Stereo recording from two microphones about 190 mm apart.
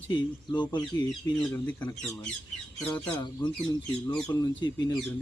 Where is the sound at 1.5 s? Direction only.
10° left (ahead or behind).